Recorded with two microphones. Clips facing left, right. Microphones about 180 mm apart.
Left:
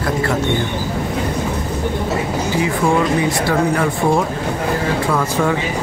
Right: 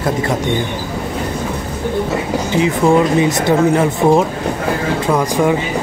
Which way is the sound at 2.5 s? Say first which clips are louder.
Right 5 dB; 20° right (ahead or behind).